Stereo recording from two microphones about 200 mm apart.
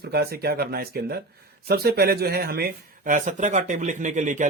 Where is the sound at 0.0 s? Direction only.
50° right (ahead or behind).